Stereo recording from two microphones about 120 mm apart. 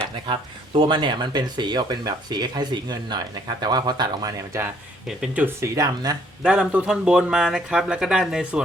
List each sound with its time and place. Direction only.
0.3 s speech: 45° right (ahead or behind); by 4.7 s 30° right (ahead or behind)
5.0 s speech: 10° right (ahead or behind)
5.6 s speech: 30° right (ahead or behind)
6.4 s speech: 5° right (ahead or behind)